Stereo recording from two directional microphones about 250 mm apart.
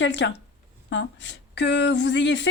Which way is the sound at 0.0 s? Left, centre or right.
Left.